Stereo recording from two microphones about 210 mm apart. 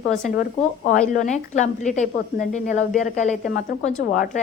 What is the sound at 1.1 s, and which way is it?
A woman's voice, 35° left (ahead or behind).